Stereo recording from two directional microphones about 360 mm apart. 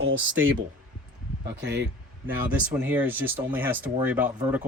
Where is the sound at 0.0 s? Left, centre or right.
Right.